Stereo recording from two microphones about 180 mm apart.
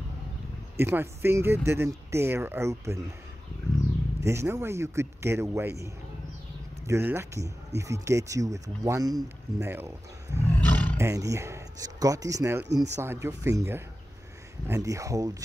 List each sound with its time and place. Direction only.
0.7 s speech: 15° right (ahead or behind)
4.2 s speech: 15° right (ahead or behind)
6.9 s speech: 15° right (ahead or behind)
10.6 s roar: 10° left (ahead or behind)
11.0 s speech: 15° right (ahead or behind)